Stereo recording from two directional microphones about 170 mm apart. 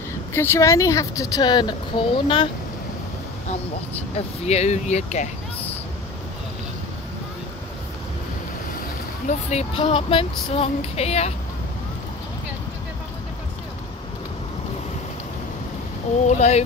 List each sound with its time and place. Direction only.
0.3 s speech: 15° left (ahead or behind)
4.5 s speech: 40° left (ahead or behind)
9.5 s speech: 35° left (ahead or behind)
16.3 s speech: 40° left (ahead or behind)